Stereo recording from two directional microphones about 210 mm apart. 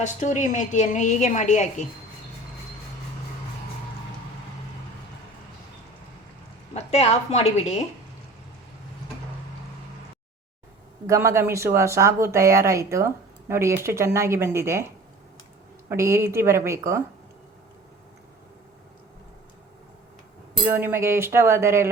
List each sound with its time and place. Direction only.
0.0 s a woman's voice: 35° left (ahead or behind)
6.7 s a woman's voice: 30° left (ahead or behind)
11.0 s speech: 15° right (ahead or behind)
20.7 s speech: 10° right (ahead or behind)